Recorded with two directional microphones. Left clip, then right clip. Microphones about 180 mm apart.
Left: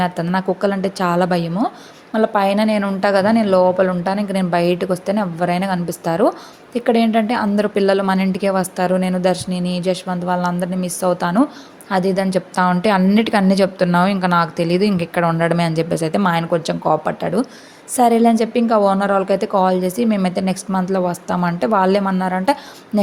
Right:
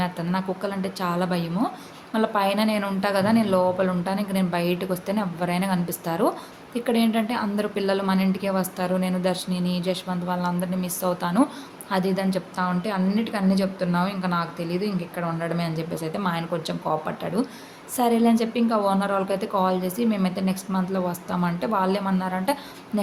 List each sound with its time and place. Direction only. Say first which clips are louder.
0.0 s a woman's voice: left 8 dB; 35° left (ahead or behind)